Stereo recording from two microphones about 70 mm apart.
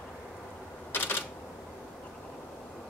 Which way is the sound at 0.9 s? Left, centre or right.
Left.